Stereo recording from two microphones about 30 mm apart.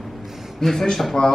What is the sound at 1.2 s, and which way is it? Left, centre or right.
Speech, left.